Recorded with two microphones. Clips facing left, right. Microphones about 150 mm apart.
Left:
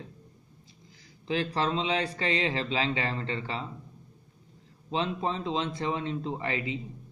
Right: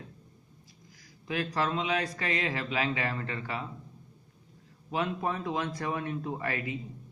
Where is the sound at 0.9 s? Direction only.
25° left (ahead or behind).